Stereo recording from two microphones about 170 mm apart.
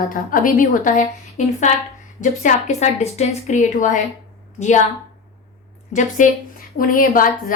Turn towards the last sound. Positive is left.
turn(degrees=55)  # may be behind; listen again after turning